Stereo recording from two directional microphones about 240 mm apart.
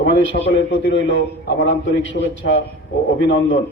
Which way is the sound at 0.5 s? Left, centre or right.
Left.